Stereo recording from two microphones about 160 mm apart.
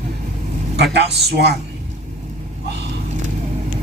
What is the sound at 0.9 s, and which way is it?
Speech, 90° right.